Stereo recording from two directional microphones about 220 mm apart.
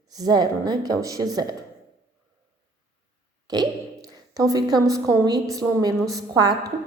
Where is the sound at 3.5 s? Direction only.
15° right (ahead or behind).